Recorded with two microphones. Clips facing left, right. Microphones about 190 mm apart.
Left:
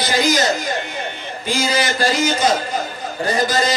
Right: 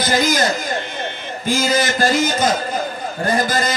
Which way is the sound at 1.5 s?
50° right (ahead or behind).